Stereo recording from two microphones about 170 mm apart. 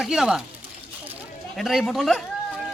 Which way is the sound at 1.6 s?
Centre (ahead or behind).